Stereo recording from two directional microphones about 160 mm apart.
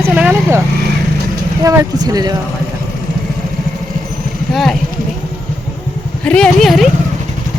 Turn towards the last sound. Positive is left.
turn(degrees=0)  # may be behind; listen again after turning